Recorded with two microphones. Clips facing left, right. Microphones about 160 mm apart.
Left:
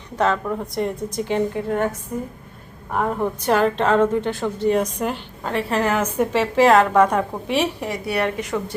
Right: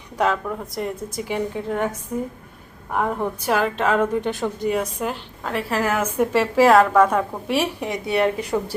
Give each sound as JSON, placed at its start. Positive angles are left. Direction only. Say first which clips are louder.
{"t": 0.4, "sound": "a woman's voice", "louder": "left 3 dB", "side_deg": 0}
{"t": 3.4, "sound": "a woman's voice", "louder": "left 3 dB", "side_deg": -5}
{"t": 7.8, "sound": "speech", "louder": "right 2 dB", "side_deg": -20}